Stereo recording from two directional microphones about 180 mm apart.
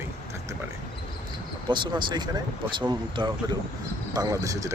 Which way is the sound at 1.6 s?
25° right (ahead or behind).